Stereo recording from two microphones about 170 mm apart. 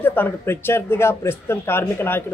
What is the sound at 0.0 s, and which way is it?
Speech, 10° left (ahead or behind).